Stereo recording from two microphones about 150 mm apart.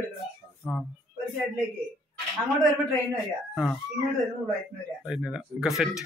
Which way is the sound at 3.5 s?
Centre (ahead or behind).